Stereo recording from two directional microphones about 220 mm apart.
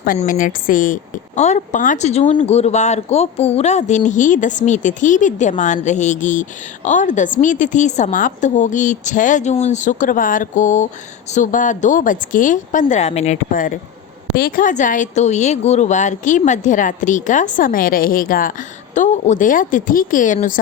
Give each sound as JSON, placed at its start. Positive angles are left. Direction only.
{"t": 0.0, "sound": "speech", "side_deg": 40}